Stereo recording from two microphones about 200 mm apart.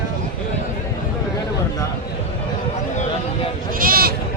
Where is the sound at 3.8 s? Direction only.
45° right (ahead or behind).